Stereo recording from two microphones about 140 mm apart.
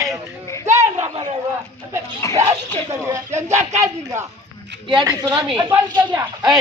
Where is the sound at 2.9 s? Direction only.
20° right (ahead or behind).